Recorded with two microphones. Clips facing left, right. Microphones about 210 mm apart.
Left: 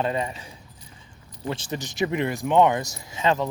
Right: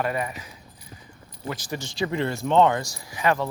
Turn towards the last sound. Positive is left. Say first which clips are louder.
# left 1 dB
turn(degrees=20)  # may be behind; listen again after turning